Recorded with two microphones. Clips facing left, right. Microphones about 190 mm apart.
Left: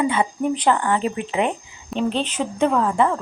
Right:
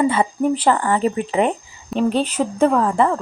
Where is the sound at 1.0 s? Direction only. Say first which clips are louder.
Right 4 dB; 40° right (ahead or behind).